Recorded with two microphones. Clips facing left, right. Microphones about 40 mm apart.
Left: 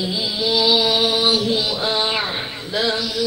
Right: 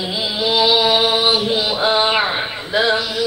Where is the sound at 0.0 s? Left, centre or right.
Right.